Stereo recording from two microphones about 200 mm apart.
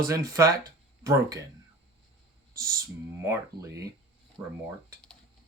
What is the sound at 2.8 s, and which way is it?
Speech, 15° right (ahead or behind).